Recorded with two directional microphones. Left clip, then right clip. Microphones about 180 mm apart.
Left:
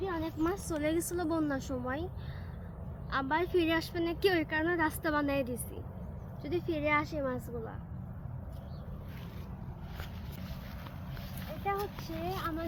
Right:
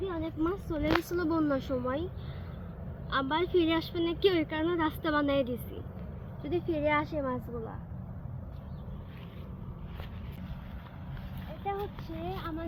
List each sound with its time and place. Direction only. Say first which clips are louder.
0.0 s speech: right 1 dB; 10° left (ahead or behind)
3.1 s speech: right 2 dB; 5° left (ahead or behind)
6.4 s speech: right 3 dB; 35° right (ahead or behind)
11.3 s speech: left 1 dB; 5° left (ahead or behind)